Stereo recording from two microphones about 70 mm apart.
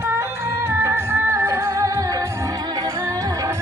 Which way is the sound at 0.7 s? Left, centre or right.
Right.